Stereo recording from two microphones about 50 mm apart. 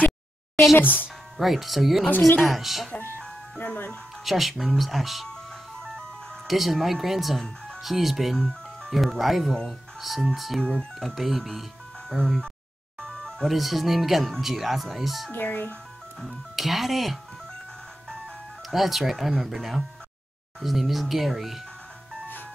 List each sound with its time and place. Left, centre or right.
0.7 s speech: left
1.4 s speech: centre
3.2 s ice cream truck: left
4.2 s speech: centre
6.4 s speech: centre
8.4 s music: centre
8.9 s speech: centre
11.1 s speech: centre
13.0 s music: centre
13.5 s speech: centre
15.3 s speech: left
16.2 s speech: centre
18.7 s speech: centre